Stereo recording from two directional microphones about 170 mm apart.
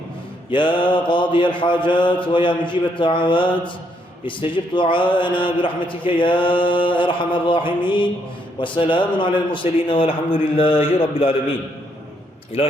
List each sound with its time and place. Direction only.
0.5 s a man's voice: 30° left (ahead or behind)
12.6 s a man's voice: 35° left (ahead or behind)